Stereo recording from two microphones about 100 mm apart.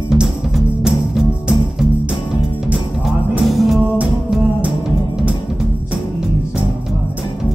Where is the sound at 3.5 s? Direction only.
Centre (ahead or behind).